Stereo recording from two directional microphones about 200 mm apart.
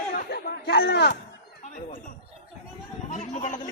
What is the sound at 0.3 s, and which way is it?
Chatter, 55° left (ahead or behind).